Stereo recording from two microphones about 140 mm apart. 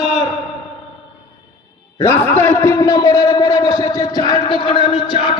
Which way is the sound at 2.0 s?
20° left (ahead or behind).